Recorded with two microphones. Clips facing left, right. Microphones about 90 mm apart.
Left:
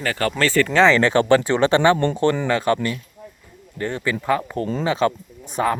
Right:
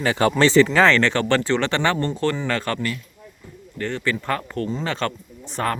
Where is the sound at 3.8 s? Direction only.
15° left (ahead or behind).